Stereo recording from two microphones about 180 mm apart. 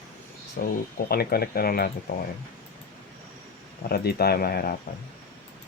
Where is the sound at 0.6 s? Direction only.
60° left (ahead or behind).